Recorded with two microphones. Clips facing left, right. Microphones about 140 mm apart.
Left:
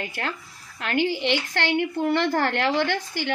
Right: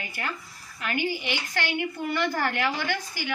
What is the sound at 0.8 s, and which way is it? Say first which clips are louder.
A woman's voice: left 5 dB; 75° left (ahead or behind).